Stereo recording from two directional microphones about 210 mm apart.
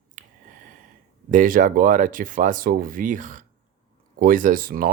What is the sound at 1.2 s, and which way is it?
Speech, 40° right (ahead or behind).